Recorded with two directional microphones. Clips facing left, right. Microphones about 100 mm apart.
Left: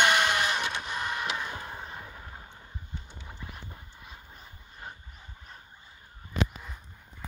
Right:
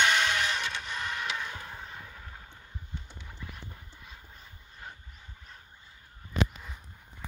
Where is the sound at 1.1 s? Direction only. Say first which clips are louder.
Left 2 dB; 10° left (ahead or behind).